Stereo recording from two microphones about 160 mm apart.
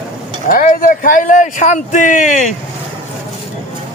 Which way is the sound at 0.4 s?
55° left (ahead or behind).